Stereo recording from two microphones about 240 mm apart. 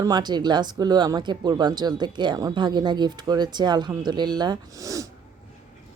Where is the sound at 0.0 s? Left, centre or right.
Centre.